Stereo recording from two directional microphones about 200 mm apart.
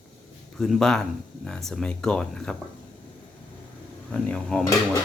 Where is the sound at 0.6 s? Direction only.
Centre (ahead or behind).